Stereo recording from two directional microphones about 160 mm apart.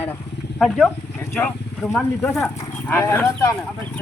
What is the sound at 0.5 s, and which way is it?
Speech, centre (ahead or behind).